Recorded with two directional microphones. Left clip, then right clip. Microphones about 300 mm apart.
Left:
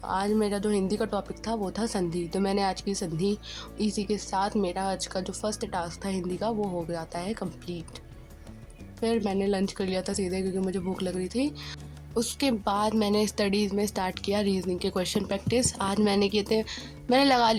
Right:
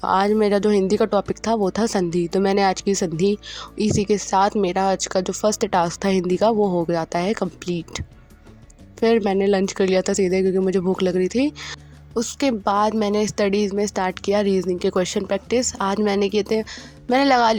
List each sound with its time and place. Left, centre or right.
0.0 s a woman's voice: left